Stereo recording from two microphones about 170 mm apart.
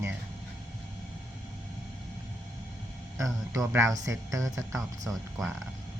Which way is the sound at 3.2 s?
20° right (ahead or behind).